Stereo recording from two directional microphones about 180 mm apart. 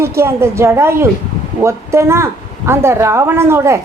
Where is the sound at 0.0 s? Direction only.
15° right (ahead or behind).